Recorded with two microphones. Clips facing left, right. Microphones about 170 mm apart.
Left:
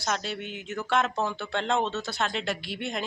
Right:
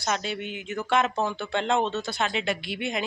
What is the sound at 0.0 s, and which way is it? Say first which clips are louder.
A woman's voice: right 2 dB; 5° right (ahead or behind).